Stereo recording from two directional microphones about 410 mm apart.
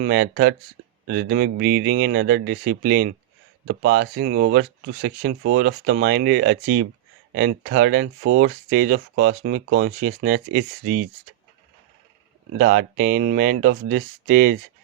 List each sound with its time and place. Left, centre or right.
0.0 s speech: right
12.5 s speech: right